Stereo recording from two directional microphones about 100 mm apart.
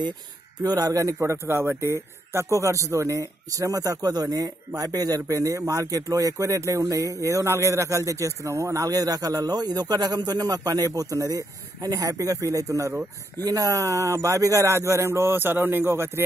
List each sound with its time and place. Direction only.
0.6 s speech: 40° right (ahead or behind)